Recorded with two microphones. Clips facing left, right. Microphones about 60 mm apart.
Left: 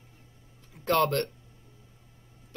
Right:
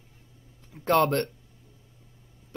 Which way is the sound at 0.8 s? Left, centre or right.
Right.